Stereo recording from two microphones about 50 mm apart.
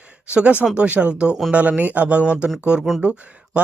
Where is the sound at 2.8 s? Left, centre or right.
Centre.